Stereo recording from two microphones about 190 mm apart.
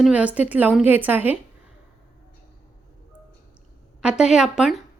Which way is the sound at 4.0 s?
5° right (ahead or behind).